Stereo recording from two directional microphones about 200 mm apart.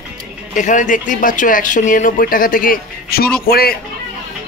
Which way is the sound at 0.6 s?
40° left (ahead or behind).